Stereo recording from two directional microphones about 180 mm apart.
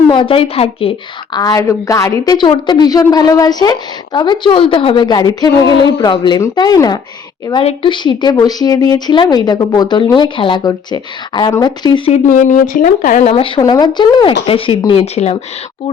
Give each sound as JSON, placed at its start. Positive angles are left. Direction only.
{"t": 0.1, "sound": "a woman's voice", "side_deg": 30}
{"t": 12.1, "sound": "speech", "side_deg": 45}
{"t": 13.6, "sound": "a woman's voice", "side_deg": 20}